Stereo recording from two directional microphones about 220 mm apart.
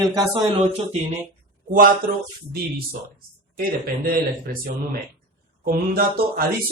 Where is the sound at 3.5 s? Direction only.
40° right (ahead or behind).